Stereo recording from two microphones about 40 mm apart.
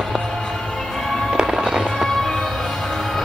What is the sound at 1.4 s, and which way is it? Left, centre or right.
Fireworks, centre.